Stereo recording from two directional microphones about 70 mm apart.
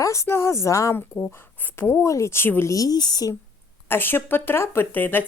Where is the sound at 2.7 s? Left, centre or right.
Left.